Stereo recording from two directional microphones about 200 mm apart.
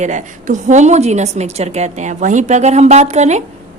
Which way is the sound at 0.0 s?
35° right (ahead or behind).